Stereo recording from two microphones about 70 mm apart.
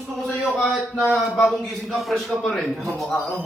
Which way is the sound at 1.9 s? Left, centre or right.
Centre.